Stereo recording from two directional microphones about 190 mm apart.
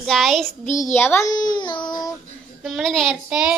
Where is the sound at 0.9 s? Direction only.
10° left (ahead or behind).